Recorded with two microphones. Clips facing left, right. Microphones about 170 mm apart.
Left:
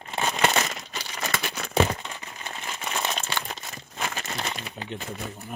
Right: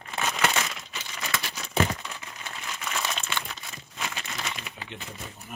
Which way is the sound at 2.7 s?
30° left (ahead or behind).